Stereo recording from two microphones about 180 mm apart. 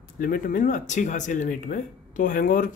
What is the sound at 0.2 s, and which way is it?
A man's voice, 50° left (ahead or behind).